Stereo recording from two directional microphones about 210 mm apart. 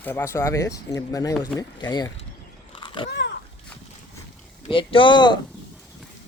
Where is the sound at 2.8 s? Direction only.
25° left (ahead or behind).